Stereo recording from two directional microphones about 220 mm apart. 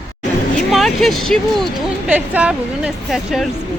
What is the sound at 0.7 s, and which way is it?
A woman's voice, centre (ahead or behind).